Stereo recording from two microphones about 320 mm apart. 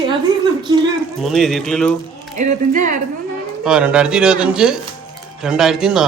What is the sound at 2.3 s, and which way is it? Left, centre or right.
Speech, right.